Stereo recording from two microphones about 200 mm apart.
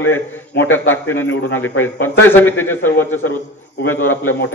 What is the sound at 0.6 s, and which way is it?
A man's voice, 10° left (ahead or behind).